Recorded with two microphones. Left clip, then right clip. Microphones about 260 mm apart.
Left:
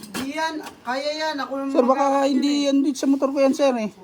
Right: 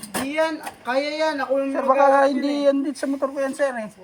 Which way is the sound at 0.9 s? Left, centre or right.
Left.